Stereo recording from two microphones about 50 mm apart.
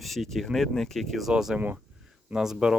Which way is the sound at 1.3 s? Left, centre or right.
Centre.